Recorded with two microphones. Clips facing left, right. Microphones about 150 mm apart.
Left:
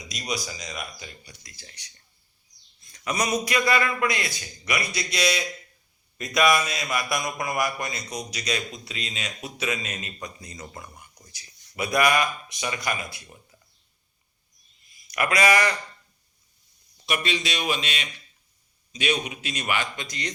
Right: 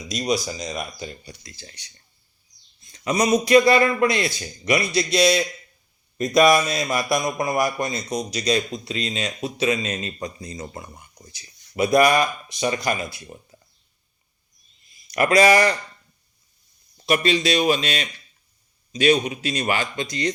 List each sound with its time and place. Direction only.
0.1 s a man's voice: 25° right (ahead or behind)
15.0 s speech: 30° right (ahead or behind)
17.1 s a man's voice: 35° right (ahead or behind)